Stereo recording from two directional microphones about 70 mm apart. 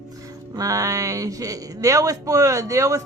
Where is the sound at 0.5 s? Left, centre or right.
Right.